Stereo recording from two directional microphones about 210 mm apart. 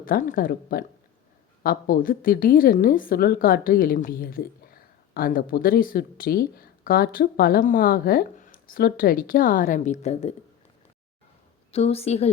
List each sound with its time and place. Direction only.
0.0 s a woman's voice: 40° left (ahead or behind)
11.7 s a woman's voice: 30° left (ahead or behind)